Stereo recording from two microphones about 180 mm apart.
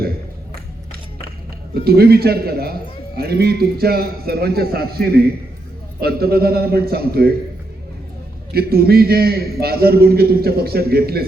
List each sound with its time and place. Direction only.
1.7 s a man's voice: 60° right (ahead or behind)
8.5 s a man's voice: 60° right (ahead or behind)